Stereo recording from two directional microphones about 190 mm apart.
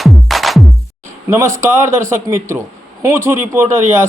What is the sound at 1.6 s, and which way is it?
Speech, 15° right (ahead or behind).